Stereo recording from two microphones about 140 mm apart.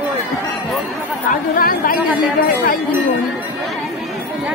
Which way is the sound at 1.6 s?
90° left.